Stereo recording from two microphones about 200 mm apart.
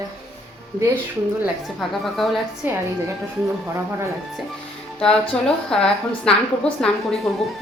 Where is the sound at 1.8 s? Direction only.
Centre (ahead or behind).